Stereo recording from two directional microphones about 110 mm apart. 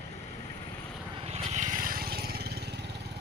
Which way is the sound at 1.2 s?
80° right.